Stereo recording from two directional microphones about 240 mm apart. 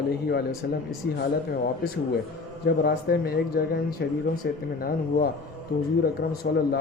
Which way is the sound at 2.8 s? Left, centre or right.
Left.